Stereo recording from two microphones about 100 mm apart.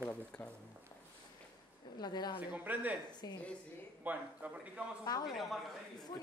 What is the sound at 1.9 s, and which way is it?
Speech, 45° left (ahead or behind).